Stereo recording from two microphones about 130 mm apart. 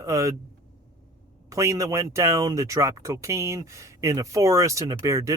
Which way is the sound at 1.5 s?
25° right (ahead or behind).